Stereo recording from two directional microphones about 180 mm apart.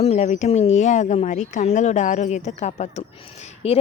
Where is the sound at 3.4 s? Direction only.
35° left (ahead or behind).